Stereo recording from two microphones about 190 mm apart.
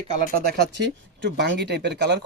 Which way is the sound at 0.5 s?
65° right (ahead or behind).